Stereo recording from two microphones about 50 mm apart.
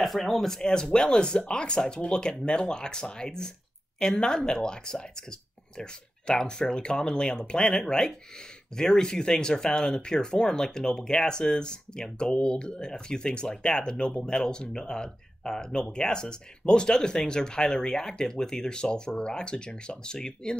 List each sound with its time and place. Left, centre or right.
0.0 s speech: centre